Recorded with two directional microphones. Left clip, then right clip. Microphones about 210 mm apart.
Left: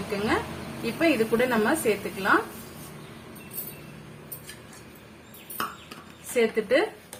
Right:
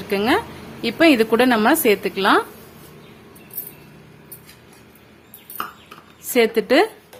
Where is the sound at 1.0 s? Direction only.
55° right (ahead or behind).